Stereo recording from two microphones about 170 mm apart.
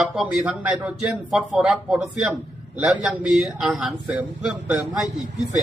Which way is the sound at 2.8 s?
5° right (ahead or behind).